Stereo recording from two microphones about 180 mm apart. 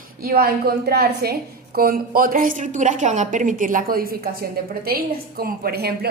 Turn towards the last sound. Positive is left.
turn(degrees=-60)  # may be behind; listen again after turning